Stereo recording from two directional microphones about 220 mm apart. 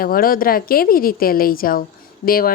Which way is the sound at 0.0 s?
40° left (ahead or behind).